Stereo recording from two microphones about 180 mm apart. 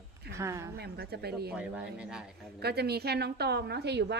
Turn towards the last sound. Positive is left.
turn(degrees=-70)  # may be behind; listen again after turning